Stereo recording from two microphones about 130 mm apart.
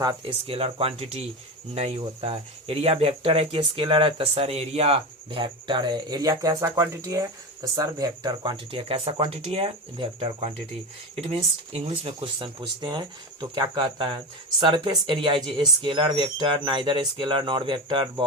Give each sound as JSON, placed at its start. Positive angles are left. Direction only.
{"t": 0.4, "sound": "speech", "side_deg": -45}
{"t": 11.1, "sound": "speech", "side_deg": -55}